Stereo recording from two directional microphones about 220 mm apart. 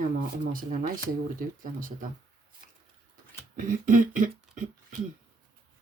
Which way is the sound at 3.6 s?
35° right (ahead or behind).